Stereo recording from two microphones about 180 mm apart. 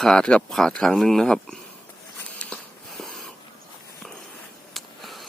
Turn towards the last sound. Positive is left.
turn(degrees=0)  # may be behind; listen again after turning